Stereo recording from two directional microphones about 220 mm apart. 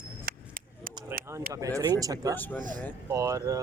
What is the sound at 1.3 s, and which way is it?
Speech, 15° right (ahead or behind).